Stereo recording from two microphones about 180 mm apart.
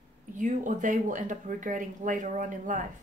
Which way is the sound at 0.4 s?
45° right (ahead or behind).